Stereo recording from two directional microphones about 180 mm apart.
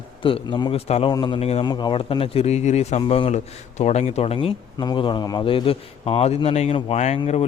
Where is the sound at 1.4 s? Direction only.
35° left (ahead or behind).